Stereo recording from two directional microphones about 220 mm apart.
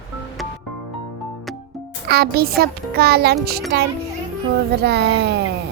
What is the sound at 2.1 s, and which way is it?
A child's voice, 45° right (ahead or behind).